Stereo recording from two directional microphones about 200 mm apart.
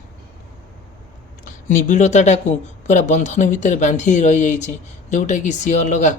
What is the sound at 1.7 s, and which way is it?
Speech, 40° left (ahead or behind).